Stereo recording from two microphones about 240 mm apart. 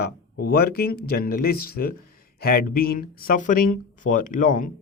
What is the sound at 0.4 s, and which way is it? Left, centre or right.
A man's voice, left.